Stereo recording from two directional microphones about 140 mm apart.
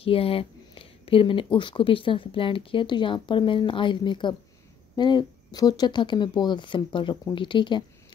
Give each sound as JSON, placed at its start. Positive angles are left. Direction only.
{"t": 0.0, "sound": "speech", "side_deg": 40}